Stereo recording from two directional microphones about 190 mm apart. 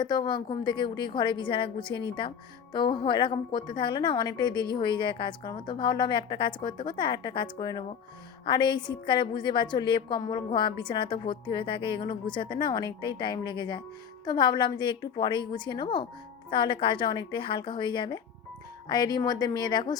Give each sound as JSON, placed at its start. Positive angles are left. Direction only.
{"t": 0.0, "sound": "a woman's voice", "side_deg": 25}